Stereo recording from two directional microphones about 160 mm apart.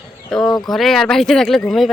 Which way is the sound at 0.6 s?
Centre (ahead or behind).